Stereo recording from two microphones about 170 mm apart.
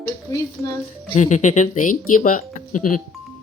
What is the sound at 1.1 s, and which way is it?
Speech, 45° left (ahead or behind).